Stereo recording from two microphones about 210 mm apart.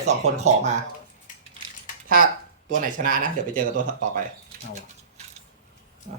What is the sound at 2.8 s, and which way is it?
Speech, 40° right (ahead or behind).